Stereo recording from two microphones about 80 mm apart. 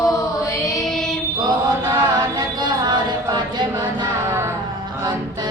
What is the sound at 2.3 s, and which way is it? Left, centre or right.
Chant, right.